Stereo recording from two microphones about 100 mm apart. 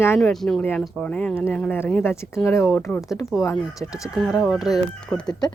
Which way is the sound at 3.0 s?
35° left (ahead or behind).